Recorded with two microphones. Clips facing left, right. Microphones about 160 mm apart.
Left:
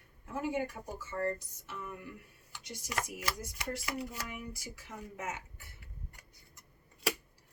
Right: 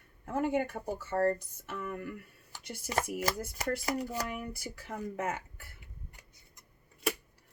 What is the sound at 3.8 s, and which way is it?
Speech, 40° right (ahead or behind).